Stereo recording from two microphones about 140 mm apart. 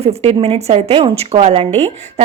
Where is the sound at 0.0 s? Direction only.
45° right (ahead or behind).